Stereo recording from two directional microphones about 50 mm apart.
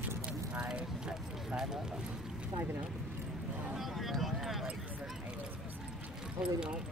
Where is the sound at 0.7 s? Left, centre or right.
Centre.